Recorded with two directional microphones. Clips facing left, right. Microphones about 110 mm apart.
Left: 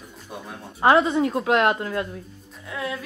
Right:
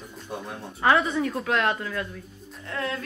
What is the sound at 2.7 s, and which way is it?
Speech, 10° left (ahead or behind).